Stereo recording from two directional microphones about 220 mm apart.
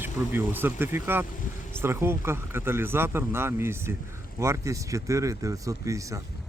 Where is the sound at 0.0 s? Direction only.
10° right (ahead or behind).